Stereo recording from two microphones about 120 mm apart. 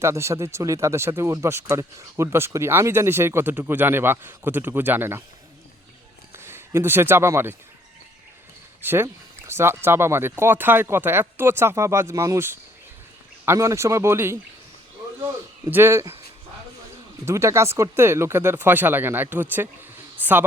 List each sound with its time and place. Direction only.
0.0 s speech: 25° right (ahead or behind)
6.3 s speech: 20° right (ahead or behind)
8.8 s speech: 20° right (ahead or behind)
15.7 s speech: 20° right (ahead or behind)
17.2 s speech: 20° right (ahead or behind)
20.2 s a sound: 15° right (ahead or behind)